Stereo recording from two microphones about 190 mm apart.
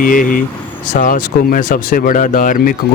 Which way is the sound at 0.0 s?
45° left (ahead or behind).